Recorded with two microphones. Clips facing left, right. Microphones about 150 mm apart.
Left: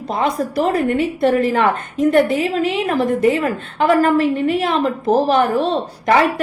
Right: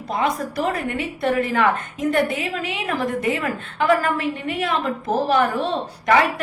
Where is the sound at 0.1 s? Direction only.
35° left (ahead or behind).